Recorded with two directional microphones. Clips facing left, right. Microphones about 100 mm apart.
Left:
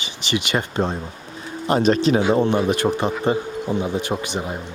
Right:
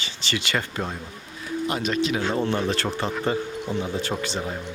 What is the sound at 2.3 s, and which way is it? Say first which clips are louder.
Speech: left 6 dB; 15° left (ahead or behind).